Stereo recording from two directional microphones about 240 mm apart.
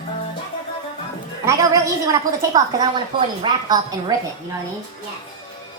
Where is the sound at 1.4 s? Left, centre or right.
Centre.